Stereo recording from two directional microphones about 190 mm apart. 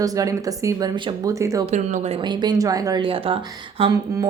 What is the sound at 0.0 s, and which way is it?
A woman's voice, 20° right (ahead or behind).